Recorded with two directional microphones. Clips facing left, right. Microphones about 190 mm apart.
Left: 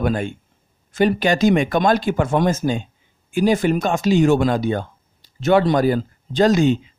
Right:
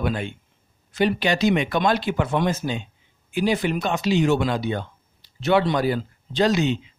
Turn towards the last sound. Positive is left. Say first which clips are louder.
# left 5 dB
turn(degrees=45)  # may be behind; listen again after turning